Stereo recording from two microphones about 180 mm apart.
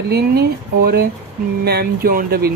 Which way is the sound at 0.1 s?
60° right (ahead or behind).